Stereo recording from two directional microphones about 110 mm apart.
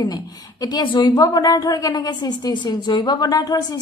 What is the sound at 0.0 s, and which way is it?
A woman's voice, 40° left (ahead or behind).